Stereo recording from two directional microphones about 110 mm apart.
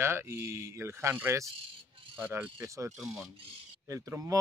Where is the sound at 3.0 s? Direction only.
Centre (ahead or behind).